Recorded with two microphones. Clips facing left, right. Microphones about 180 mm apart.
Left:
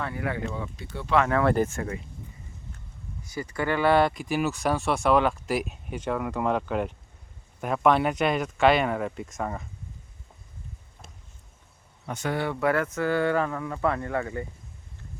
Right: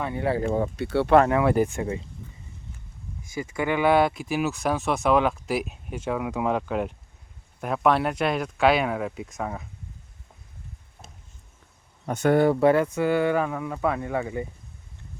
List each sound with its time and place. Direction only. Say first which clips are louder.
0.0 s speech: right 5 dB; 25° right (ahead or behind)
0.4 s speech: right 8 dB; 50° right (ahead or behind)
0.8 s speech: right 13 dB; 70° right (ahead or behind)
1.3 s speech: right 2 dB; 10° right (ahead or behind)
3.5 s speech: right 1 dB; 15° right (ahead or behind)
12.0 s speech: right 9 dB; 55° right (ahead or behind)
12.5 s speech: right 7 dB; 30° right (ahead or behind)
12.7 s speech: right 3 dB; 20° right (ahead or behind)